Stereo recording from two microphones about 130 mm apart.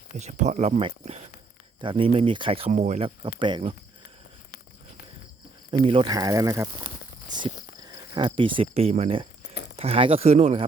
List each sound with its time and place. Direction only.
0.2 s speech: 65° right (ahead or behind)
0.8 s speech: 50° right (ahead or behind); by 3.0 s 65° right (ahead or behind)
3.0 s speech: 40° right (ahead or behind)
5.7 s speech: 40° right (ahead or behind); by 6.7 s 25° right (ahead or behind)
8.1 s speech: 40° right (ahead or behind)